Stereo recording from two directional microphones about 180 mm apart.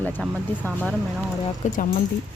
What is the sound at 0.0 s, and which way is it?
Speech, 10° left (ahead or behind).